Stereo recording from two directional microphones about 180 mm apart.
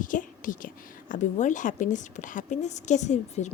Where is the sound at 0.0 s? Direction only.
45° left (ahead or behind).